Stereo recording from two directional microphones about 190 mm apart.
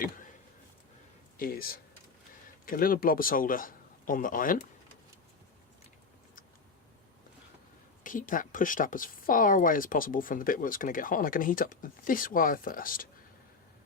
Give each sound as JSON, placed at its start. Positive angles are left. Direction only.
{"t": 1.4, "sound": "speech", "side_deg": 50}
{"t": 8.0, "sound": "speech", "side_deg": 45}